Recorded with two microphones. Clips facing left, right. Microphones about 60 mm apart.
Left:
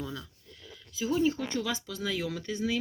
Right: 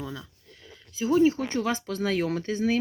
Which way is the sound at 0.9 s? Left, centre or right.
Right.